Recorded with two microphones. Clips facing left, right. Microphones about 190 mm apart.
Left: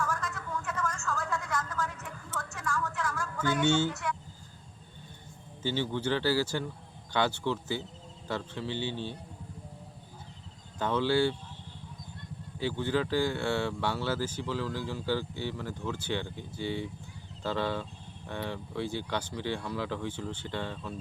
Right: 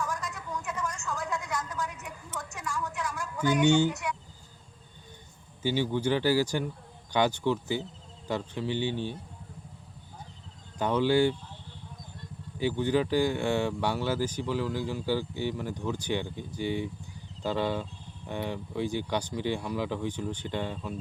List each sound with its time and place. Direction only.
0.0 s a sound: 15° right (ahead or behind)
5.6 s speech: 15° right (ahead or behind)
10.8 s speech: 15° right (ahead or behind)
12.5 s speech: 15° right (ahead or behind)